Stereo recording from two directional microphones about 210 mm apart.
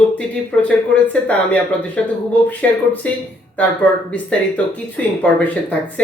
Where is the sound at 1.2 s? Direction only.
5° left (ahead or behind).